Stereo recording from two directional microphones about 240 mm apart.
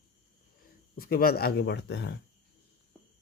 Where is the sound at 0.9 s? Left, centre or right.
Left.